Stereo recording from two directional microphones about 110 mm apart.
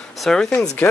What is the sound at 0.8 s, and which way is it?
Speech, 20° left (ahead or behind).